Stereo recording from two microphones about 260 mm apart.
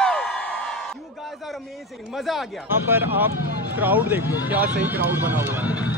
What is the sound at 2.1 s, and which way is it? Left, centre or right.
Speech, centre.